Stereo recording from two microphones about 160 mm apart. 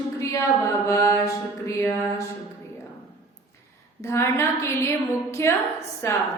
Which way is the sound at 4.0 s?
15° left (ahead or behind).